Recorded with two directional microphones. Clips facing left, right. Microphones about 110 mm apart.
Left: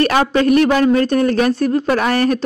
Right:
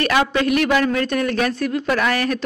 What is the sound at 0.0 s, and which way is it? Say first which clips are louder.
A woman's voice: left 4 dB; 35° left (ahead or behind).